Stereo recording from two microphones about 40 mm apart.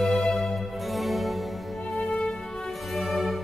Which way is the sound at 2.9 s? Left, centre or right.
Centre.